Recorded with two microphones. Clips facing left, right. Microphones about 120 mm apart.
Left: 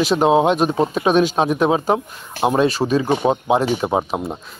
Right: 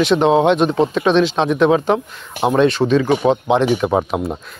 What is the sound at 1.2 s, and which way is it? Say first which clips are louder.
Speech: right 2 dB; 45° left (ahead or behind).